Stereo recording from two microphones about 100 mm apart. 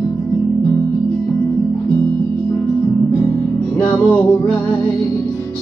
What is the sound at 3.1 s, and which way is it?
Music, 25° left (ahead or behind).